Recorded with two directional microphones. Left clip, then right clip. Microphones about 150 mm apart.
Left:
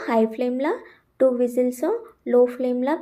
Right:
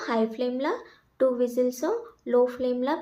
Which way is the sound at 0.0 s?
25° left (ahead or behind).